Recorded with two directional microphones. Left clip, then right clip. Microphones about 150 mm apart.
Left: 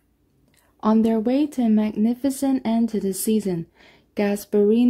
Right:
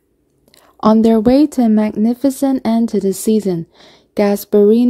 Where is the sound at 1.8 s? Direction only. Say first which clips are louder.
Right 7 dB; 25° right (ahead or behind).